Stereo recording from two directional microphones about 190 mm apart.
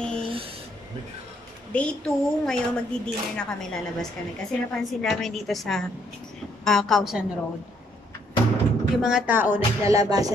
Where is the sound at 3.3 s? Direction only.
5° left (ahead or behind).